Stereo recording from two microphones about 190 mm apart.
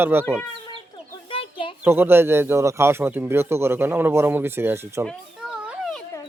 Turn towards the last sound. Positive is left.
turn(degrees=0)  # may be behind; listen again after turning